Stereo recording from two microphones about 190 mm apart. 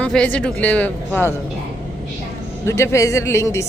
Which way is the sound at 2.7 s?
15° left (ahead or behind).